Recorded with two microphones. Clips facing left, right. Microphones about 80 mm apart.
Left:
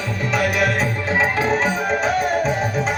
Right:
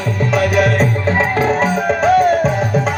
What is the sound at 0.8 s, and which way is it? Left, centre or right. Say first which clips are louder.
Music: right 4 dB; right.